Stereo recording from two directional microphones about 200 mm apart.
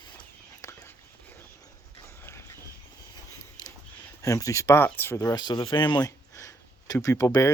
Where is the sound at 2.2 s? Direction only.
10° left (ahead or behind).